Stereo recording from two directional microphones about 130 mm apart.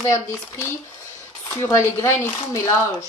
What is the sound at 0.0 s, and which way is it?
A woman's voice, 20° left (ahead or behind).